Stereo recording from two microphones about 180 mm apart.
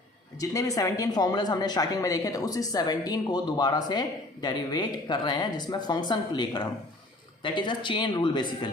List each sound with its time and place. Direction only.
0.3 s speech: 20° left (ahead or behind)